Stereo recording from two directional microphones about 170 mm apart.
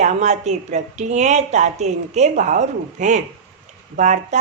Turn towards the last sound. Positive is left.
turn(degrees=-45)  # may be behind; listen again after turning